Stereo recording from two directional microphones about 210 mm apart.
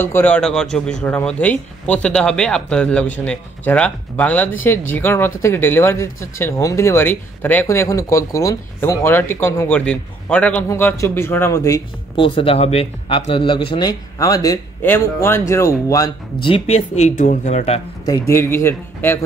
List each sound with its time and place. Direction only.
0.0 s speech: 10° left (ahead or behind)
16.4 s speech: 30° left (ahead or behind)
18.2 s speech: 10° left (ahead or behind)